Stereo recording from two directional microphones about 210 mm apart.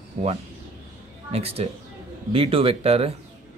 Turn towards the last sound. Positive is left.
turn(degrees=-30)  # may be behind; listen again after turning